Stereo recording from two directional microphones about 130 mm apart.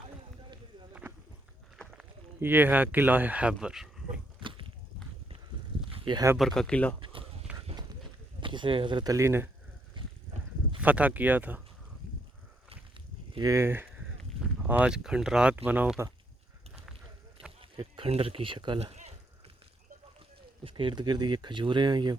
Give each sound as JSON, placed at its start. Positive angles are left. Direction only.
{"t": 2.0, "sound": "speech", "side_deg": -15}
{"t": 4.4, "sound": "a sound", "side_deg": -40}
{"t": 5.9, "sound": "a sound", "side_deg": -35}
{"t": 6.3, "sound": "speech", "side_deg": 0}
{"t": 7.0, "sound": "a sound", "side_deg": -40}
{"t": 7.5, "sound": "horse", "side_deg": -10}
{"t": 8.4, "sound": "speech", "side_deg": -40}
{"t": 9.1, "sound": "speech", "side_deg": -20}
{"t": 10.0, "sound": "horse", "side_deg": -40}
{"t": 10.8, "sound": "speech", "side_deg": -10}
{"t": 13.4, "sound": "speech", "side_deg": -20}
{"t": 17.6, "sound": "speech", "side_deg": -45}
{"t": 20.7, "sound": "speech", "side_deg": -40}